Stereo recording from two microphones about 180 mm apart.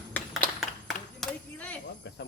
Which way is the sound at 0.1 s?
10° left (ahead or behind).